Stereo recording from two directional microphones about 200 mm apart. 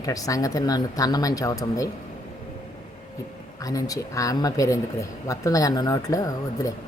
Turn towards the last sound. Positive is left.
turn(degrees=15)  # may be behind; listen again after turning